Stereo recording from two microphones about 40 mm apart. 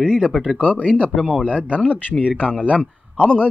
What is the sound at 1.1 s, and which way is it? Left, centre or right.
Speech, centre.